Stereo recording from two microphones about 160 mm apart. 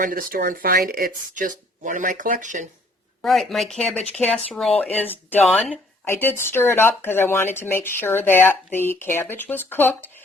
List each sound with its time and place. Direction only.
0.0 s speech: 60° right (ahead or behind)
3.2 s speech: centre (ahead or behind)